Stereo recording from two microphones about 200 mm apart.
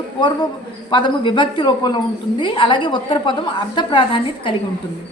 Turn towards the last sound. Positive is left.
turn(degrees=25)  # may be behind; listen again after turning